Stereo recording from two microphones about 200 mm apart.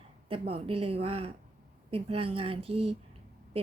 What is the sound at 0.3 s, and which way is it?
A woman's voice, 30° right (ahead or behind).